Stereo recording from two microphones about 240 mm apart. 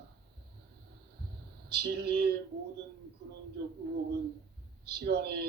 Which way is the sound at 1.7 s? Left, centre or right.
Right.